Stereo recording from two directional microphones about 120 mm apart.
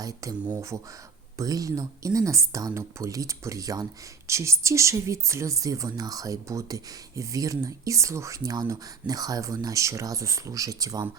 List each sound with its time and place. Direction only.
0.0 s speech: 30° right (ahead or behind)